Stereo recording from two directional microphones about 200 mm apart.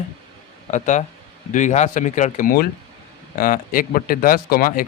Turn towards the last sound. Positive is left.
turn(degrees=45)  # may be behind; listen again after turning